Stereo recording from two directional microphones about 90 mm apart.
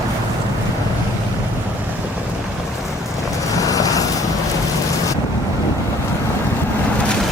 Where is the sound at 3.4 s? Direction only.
40° left (ahead or behind).